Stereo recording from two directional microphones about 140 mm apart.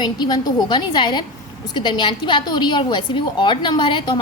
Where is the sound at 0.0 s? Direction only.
30° left (ahead or behind).